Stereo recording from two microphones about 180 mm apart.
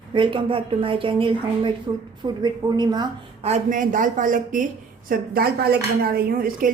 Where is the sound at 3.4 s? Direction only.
40° right (ahead or behind).